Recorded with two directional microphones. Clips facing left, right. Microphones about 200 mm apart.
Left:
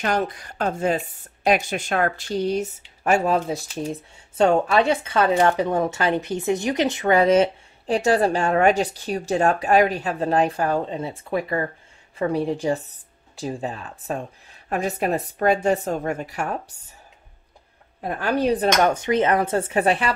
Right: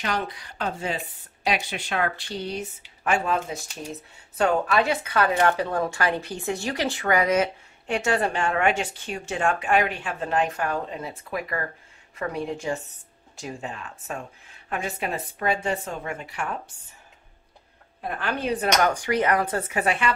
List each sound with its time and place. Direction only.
0.0 s speech: 50° left (ahead or behind)
18.0 s speech: 40° left (ahead or behind)